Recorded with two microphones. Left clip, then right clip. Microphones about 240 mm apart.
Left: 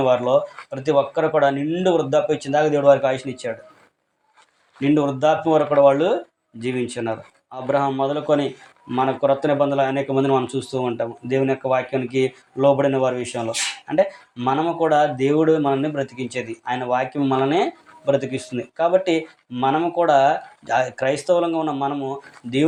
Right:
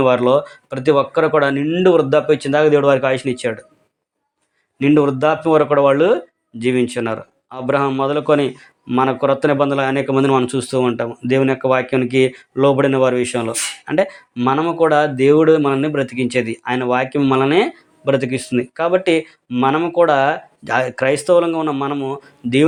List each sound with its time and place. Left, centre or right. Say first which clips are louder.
0.0 s speech: right 4 dB; right
4.8 s speech: right 5 dB; right